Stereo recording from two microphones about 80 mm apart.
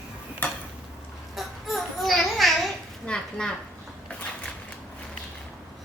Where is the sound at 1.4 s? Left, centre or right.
Centre.